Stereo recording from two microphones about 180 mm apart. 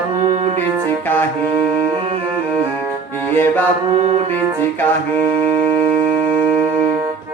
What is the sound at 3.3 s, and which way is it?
Music, 10° left (ahead or behind).